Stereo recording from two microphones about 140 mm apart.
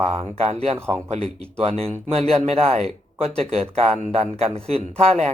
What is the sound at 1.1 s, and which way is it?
Speech, 45° right (ahead or behind).